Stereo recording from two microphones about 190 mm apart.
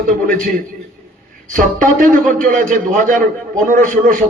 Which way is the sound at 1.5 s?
45° right (ahead or behind).